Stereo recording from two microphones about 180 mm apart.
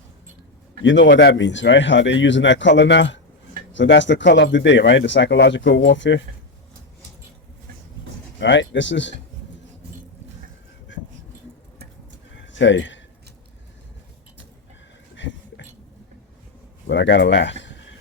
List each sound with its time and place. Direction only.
0.9 s speech: 85° left
8.4 s speech: 80° left
12.5 s speech: 90° left
15.1 s a sound: 85° left
16.8 s speech: 85° left